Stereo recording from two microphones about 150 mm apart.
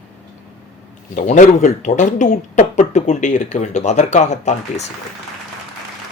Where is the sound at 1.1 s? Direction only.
55° left (ahead or behind).